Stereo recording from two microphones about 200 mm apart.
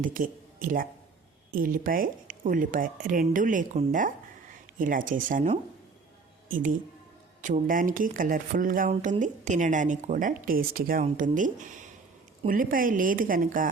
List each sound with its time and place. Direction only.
0.0 s a woman's voice: 45° right (ahead or behind)